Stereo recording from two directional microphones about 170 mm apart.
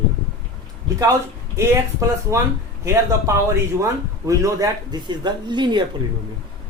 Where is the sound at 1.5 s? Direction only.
15° right (ahead or behind).